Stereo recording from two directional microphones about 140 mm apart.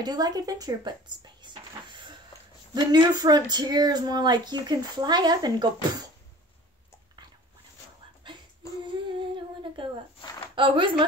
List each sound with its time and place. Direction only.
0.0 s speech: 30° right (ahead or behind)
8.8 s a sound: 35° right (ahead or behind)
10.5 s speech: 35° right (ahead or behind)